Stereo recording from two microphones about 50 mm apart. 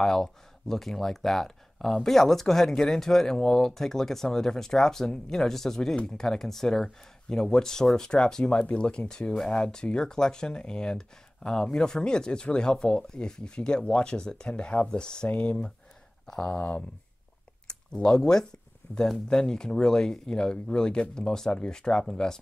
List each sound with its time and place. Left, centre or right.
0.0 s speech: centre; by 15.5 s left
16.3 s speech: centre
16.5 s speech: left